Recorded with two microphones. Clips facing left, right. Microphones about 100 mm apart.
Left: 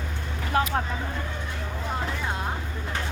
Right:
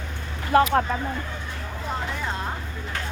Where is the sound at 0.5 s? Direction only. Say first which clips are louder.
Right 7 dB; 75° right (ahead or behind).